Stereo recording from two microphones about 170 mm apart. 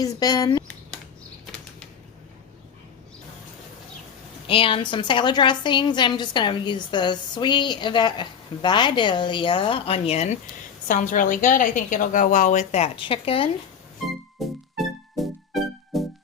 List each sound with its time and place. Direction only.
0.0 s a woman's voice: 20° left (ahead or behind)
4.4 s a woman's voice: 30° left (ahead or behind)
10.8 s a woman's voice: 50° left (ahead or behind); by 13.5 s 30° left (ahead or behind)
14.3 s music: centre (ahead or behind)